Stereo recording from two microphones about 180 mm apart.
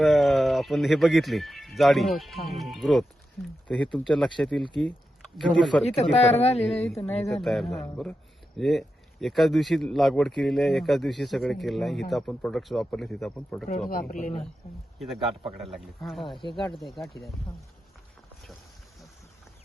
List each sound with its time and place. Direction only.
0.0 s speech: centre (ahead or behind)
6.0 s a woman's voice: 35° left (ahead or behind)
7.4 s speech: centre (ahead or behind)
13.9 s speech: 50° left (ahead or behind)
14.9 s a man's voice: centre (ahead or behind)